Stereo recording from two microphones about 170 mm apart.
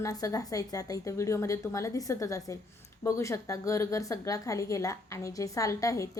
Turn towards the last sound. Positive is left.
turn(degrees=20)  # may be behind; listen again after turning